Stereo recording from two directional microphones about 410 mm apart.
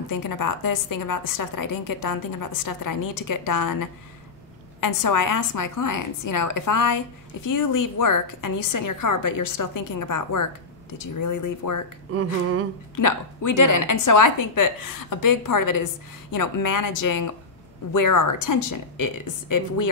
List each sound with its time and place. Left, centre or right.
0.1 s a woman's voice: left
13.0 s a woman's voice: left
17.9 s a woman's voice: left